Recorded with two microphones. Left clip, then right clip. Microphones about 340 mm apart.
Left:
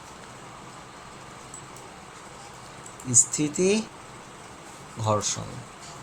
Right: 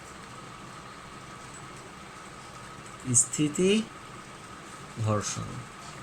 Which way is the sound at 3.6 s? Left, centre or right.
Centre.